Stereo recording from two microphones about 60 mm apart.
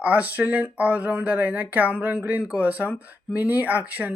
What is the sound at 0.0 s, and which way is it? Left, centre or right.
Speech, right.